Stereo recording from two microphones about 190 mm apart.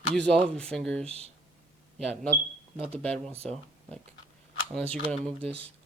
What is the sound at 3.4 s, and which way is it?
Speech, 5° left (ahead or behind).